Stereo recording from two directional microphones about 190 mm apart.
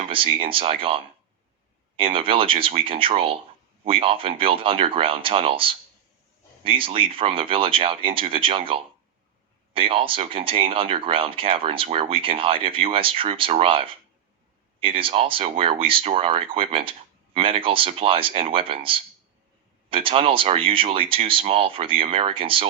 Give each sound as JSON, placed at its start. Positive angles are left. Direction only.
{"t": 0.0, "sound": "speech", "side_deg": -30}